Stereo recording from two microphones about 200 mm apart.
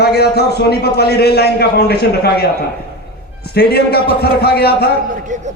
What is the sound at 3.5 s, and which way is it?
A man's voice, 55° left (ahead or behind).